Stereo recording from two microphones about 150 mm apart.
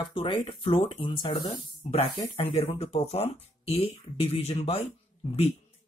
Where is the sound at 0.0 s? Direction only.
30° left (ahead or behind).